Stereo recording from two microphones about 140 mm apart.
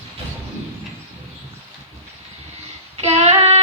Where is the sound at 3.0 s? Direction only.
50° right (ahead or behind).